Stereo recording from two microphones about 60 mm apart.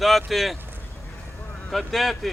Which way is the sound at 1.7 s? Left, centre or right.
Centre.